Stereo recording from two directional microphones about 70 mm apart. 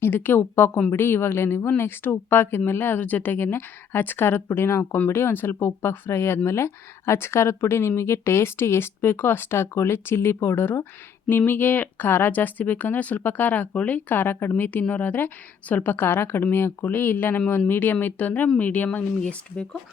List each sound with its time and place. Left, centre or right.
0.0 s speech: left